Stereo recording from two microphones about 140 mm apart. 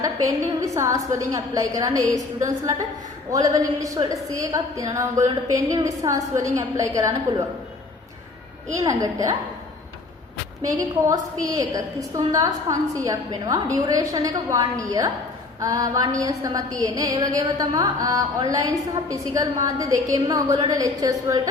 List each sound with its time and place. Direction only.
0.0 s a woman's voice: 25° right (ahead or behind)
3.3 s a woman's voice: 25° right (ahead or behind)
8.7 s a woman's voice: 20° right (ahead or behind)
10.6 s a woman's voice: 25° right (ahead or behind)